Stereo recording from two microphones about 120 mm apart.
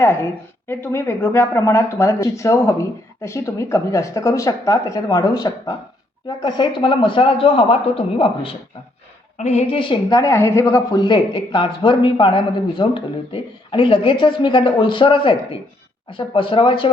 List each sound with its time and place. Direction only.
0.0 s speech: 20° left (ahead or behind); by 8.5 s 50° left (ahead or behind)
9.4 s a woman's voice: 65° left (ahead or behind)
9.7 s speech: 35° left (ahead or behind)